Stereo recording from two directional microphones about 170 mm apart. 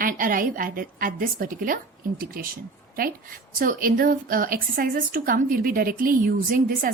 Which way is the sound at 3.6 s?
55° right (ahead or behind).